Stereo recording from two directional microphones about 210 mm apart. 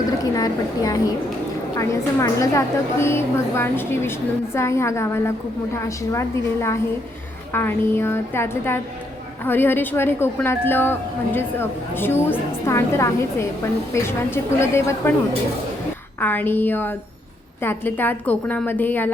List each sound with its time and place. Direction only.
0.3 s a woman's voice: 15° left (ahead or behind)
16.2 s a woman's voice: 10° left (ahead or behind)